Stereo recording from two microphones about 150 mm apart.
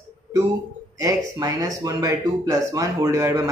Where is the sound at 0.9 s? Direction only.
25° right (ahead or behind).